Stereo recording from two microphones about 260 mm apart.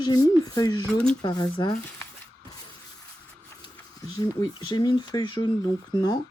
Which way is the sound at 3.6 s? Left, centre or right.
Centre.